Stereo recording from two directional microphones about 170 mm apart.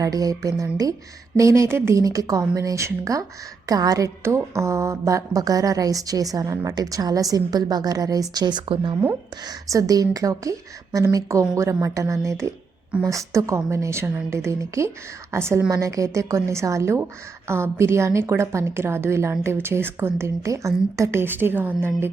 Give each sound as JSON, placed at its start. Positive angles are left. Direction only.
{"t": 0.0, "sound": "a woman's voice", "side_deg": -20}